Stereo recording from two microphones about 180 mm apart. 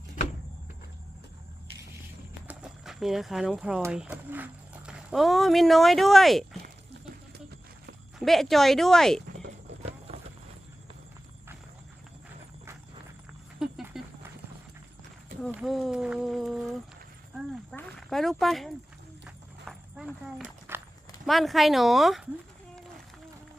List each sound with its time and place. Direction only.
2.5 s speech: 5° right (ahead or behind)
8.2 s speech: centre (ahead or behind)
10.1 s run: 35° right (ahead or behind)
13.6 s a sound: centre (ahead or behind)
15.5 s speech: centre (ahead or behind)
17.3 s a sound: centre (ahead or behind)
17.7 s speech: centre (ahead or behind)
19.2 s clip-clop: 5° right (ahead or behind)
21.2 s speech: centre (ahead or behind)